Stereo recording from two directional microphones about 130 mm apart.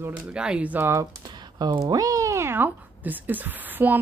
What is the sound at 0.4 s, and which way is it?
Speech, 10° right (ahead or behind).